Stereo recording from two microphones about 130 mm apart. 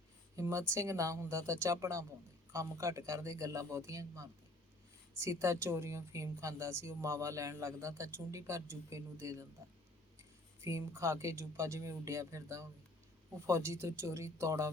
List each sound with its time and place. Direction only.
0.3 s a woman's voice: 20° right (ahead or behind)
10.6 s a woman's voice: 20° right (ahead or behind)